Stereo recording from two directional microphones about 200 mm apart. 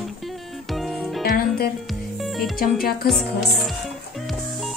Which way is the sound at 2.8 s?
45° left (ahead or behind).